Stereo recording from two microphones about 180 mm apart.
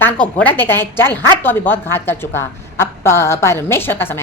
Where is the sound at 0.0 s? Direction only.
10° left (ahead or behind).